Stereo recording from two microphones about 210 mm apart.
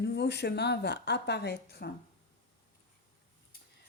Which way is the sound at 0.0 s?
55° left (ahead or behind).